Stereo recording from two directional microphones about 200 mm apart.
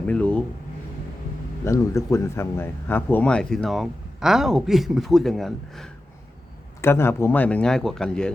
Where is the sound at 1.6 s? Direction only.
15° left (ahead or behind).